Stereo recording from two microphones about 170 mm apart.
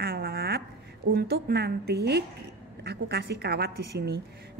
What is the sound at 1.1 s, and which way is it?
A woman's voice, 70° right (ahead or behind).